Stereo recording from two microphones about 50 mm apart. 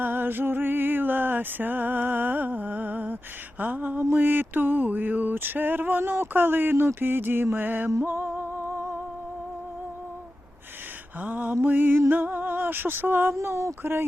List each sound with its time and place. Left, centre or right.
0.0 s music: right
4.1 s a sound: right
8.0 s music: right
11.2 s music: right
12.2 s a sound: right
13.3 s speech: right